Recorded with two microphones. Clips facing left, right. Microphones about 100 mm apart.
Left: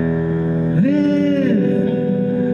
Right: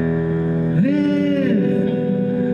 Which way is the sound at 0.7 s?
25° left (ahead or behind).